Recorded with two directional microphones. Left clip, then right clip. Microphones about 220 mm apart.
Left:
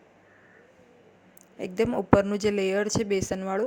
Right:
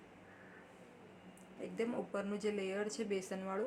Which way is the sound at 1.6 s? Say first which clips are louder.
Left 13 dB; 40° left (ahead or behind).